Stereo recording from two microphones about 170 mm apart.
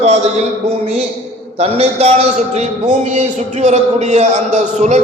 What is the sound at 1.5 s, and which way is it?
A man's voice, 40° right (ahead or behind).